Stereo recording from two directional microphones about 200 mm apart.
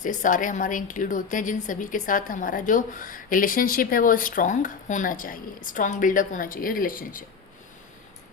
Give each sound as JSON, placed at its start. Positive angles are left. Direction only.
{"t": 0.0, "sound": "a woman's voice", "side_deg": 40}